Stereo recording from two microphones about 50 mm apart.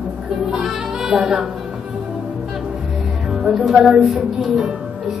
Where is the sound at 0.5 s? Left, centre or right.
Centre.